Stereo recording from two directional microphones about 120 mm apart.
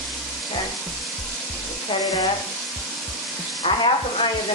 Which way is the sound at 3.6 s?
50° left (ahead or behind).